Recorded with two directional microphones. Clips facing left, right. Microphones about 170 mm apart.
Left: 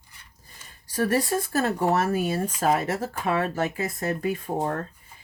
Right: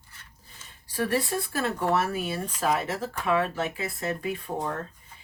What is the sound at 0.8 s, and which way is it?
Speech, 40° left (ahead or behind).